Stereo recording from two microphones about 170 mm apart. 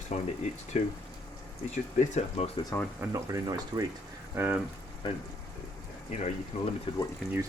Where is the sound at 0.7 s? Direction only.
40° left (ahead or behind).